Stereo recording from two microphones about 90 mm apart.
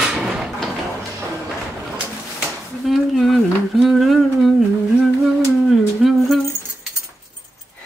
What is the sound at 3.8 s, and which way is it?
Humming, centre (ahead or behind).